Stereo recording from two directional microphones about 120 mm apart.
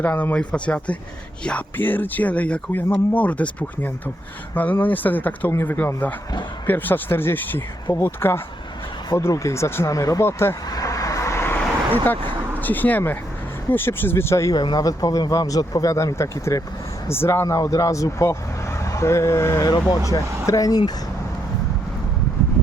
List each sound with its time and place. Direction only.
0.0 s speech: 15° left (ahead or behind); by 20.9 s 30° left (ahead or behind)